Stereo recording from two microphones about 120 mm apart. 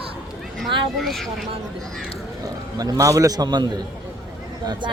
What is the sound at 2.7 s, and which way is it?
A man's voice, 30° right (ahead or behind).